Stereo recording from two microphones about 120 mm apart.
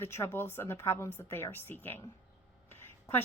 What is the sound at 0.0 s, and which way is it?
A woman's voice, 20° left (ahead or behind).